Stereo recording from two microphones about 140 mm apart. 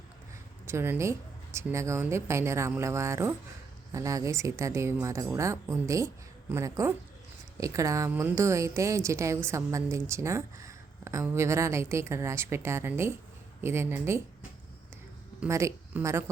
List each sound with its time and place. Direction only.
0.7 s a woman's voice: 15° right (ahead or behind)
15.4 s a woman's voice: 20° right (ahead or behind)